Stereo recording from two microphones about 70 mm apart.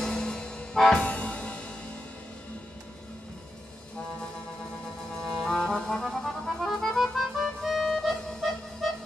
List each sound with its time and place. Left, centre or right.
0.0 s music: centre
5.1 s music: centre